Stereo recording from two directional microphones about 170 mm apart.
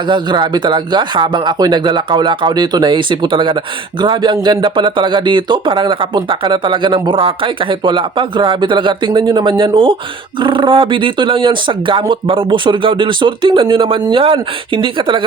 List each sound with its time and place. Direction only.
0.1 s speech: 25° right (ahead or behind)